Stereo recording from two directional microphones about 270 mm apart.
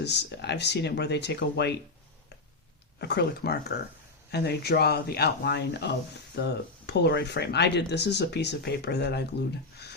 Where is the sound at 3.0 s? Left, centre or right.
Left.